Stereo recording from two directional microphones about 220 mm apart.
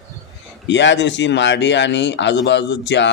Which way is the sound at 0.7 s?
55° left (ahead or behind).